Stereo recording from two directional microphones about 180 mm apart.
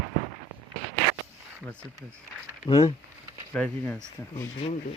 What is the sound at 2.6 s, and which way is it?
Speech, 30° left (ahead or behind).